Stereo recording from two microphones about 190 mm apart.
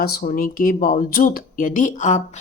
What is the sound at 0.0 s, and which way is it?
A woman's voice, 55° left (ahead or behind).